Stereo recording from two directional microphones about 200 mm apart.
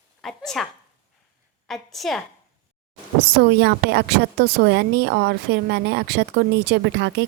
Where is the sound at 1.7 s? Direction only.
Centre (ahead or behind).